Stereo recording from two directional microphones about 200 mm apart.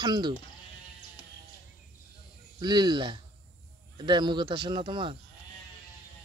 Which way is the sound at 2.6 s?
20° right (ahead or behind).